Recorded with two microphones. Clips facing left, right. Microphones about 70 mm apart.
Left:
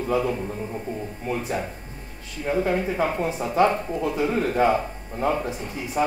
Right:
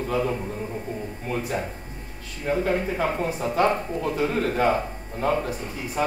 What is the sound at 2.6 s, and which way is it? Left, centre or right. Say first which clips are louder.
Speech: left 2 dB; centre.